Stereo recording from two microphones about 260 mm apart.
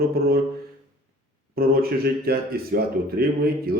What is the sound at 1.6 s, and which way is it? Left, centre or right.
Speech, right.